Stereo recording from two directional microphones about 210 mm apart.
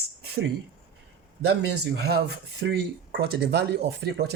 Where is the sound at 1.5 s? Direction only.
50° right (ahead or behind).